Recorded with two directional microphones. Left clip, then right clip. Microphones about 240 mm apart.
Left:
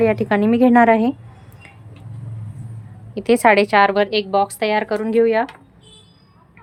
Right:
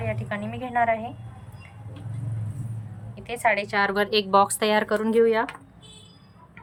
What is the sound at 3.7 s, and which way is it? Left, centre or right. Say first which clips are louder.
A woman's voice: left 8 dB; centre.